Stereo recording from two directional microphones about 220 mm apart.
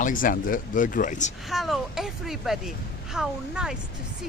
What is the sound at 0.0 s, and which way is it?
Speech, 40° left (ahead or behind).